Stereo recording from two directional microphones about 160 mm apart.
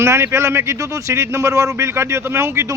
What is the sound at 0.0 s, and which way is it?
Speech, 15° right (ahead or behind).